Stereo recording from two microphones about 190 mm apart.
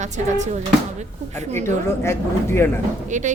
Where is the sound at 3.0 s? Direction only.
40° right (ahead or behind).